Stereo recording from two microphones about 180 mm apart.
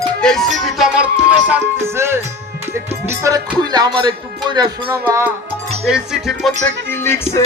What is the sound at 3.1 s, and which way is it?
Speech, 20° right (ahead or behind).